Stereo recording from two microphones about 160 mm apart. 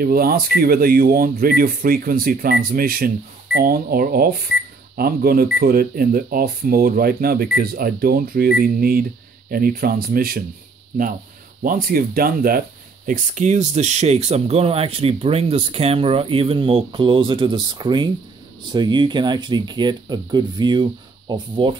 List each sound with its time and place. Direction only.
0.0 s speech: 70° right (ahead or behind)
11.6 s speech: 60° right (ahead or behind); by 21.7 s 30° right (ahead or behind)